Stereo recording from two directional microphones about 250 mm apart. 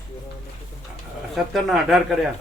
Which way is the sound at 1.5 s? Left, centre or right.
Centre.